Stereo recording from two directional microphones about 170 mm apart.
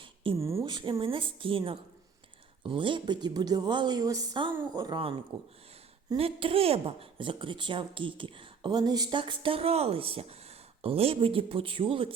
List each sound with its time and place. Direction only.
0.0 s a sound: 30° right (ahead or behind)
0.3 s speech: 15° right (ahead or behind)
0.7 s speech: 30° right (ahead or behind)